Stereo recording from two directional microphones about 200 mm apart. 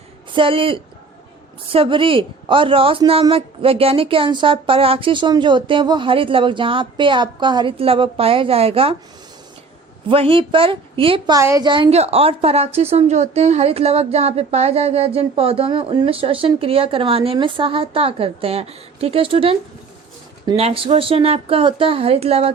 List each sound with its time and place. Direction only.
0.3 s a woman's voice: 25° right (ahead or behind)
10.1 s a woman's voice: 25° right (ahead or behind)
11.3 s a woman's voice: 15° right (ahead or behind)